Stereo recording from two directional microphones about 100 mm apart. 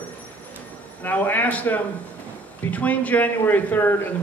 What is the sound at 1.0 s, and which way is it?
A man's voice, 15° left (ahead or behind).